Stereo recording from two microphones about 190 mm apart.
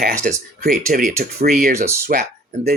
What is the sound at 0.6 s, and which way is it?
Speech, 45° right (ahead or behind).